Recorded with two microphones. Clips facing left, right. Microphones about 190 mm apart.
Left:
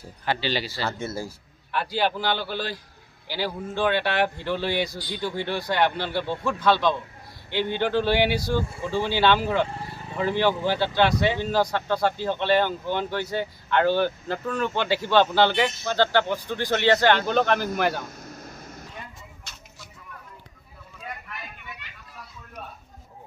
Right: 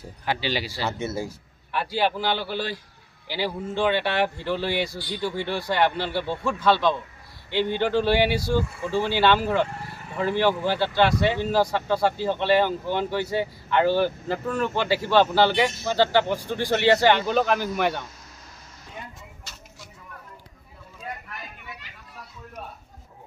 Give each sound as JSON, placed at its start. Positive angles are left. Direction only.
{"t": 0.2, "sound": "a man's voice", "side_deg": -10}
{"t": 1.7, "sound": "a man's voice", "side_deg": -5}
{"t": 8.4, "sound": "speech", "side_deg": 20}
{"t": 9.0, "sound": "a man's voice", "side_deg": -5}
{"t": 18.2, "sound": "air conditioning", "side_deg": 50}